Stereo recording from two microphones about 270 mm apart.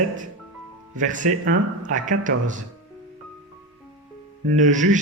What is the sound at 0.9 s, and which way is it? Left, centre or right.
Speech, right.